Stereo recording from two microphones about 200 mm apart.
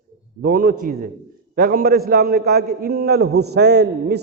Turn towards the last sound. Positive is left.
turn(degrees=-55)  # may be behind; listen again after turning